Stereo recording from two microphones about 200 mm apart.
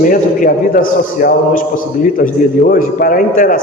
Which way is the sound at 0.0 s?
45° left (ahead or behind).